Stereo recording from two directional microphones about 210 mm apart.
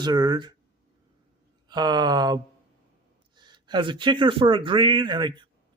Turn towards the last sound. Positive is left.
turn(degrees=-20)  # may be behind; listen again after turning